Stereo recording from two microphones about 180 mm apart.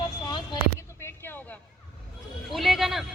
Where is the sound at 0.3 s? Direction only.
25° left (ahead or behind).